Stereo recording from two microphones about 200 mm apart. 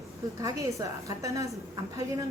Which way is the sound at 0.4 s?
15° right (ahead or behind).